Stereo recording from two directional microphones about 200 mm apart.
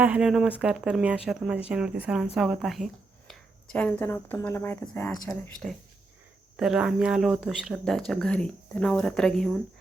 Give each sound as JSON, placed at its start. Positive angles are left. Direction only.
{"t": 0.0, "sound": "speech", "side_deg": -5}